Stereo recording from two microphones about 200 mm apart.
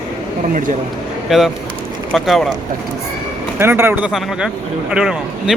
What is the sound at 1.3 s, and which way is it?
Speech, 5° right (ahead or behind).